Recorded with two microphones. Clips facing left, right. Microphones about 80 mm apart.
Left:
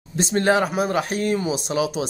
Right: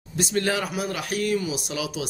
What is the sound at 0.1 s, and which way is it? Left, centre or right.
Speech, left.